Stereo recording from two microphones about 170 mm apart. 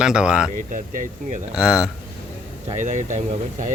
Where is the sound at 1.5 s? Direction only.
5° right (ahead or behind).